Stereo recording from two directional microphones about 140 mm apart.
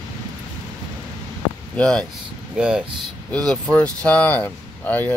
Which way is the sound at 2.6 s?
5° right (ahead or behind).